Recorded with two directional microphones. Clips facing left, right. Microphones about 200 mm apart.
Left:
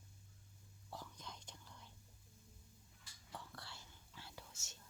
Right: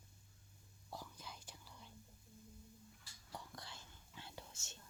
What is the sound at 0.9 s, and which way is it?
Whispering, 10° right (ahead or behind).